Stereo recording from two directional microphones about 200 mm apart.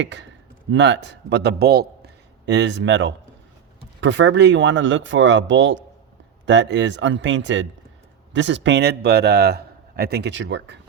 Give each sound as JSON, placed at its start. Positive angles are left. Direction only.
{"t": 0.0, "sound": "a man's voice", "side_deg": -60}